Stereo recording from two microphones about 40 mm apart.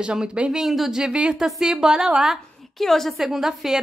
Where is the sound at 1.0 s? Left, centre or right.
Right.